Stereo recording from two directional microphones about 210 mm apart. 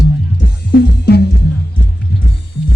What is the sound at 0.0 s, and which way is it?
Music, 50° left (ahead or behind).